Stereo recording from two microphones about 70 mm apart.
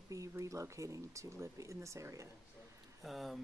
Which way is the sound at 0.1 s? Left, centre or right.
Right.